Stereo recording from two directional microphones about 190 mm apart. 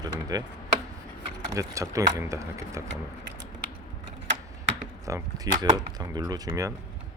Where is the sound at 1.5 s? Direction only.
15° right (ahead or behind).